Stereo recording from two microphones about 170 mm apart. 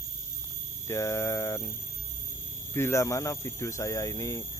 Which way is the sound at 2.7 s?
15° left (ahead or behind).